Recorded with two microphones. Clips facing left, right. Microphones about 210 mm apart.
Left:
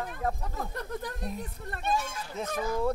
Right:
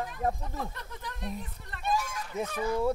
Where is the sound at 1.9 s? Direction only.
25° left (ahead or behind).